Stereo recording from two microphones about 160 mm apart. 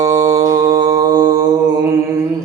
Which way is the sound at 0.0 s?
20° right (ahead or behind).